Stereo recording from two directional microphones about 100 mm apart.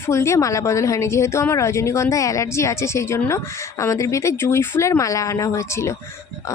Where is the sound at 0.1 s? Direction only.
30° left (ahead or behind).